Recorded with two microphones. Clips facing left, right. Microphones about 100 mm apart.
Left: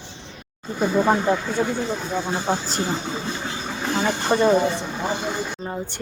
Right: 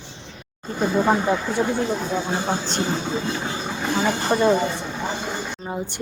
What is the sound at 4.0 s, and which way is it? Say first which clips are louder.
Speech: left 1 dB; centre (ahead or behind).